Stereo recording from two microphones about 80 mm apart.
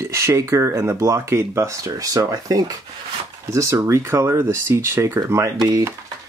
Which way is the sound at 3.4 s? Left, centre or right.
Right.